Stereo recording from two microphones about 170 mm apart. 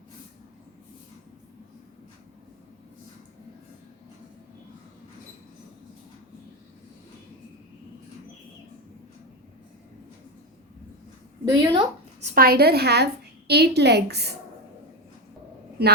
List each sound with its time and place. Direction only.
11.5 s speech: 25° right (ahead or behind)
12.2 s a woman's voice: 60° right (ahead or behind); by 14.3 s 75° right (ahead or behind)